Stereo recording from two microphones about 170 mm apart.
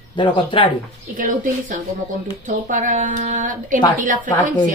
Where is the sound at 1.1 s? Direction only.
50° right (ahead or behind).